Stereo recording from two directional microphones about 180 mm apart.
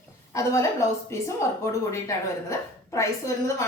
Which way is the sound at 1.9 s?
15° left (ahead or behind).